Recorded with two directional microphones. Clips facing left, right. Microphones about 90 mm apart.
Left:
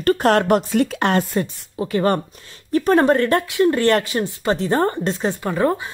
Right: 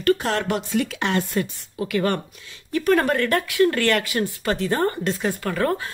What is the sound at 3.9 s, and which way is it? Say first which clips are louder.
A woman's voice: left 4 dB; 35° left (ahead or behind).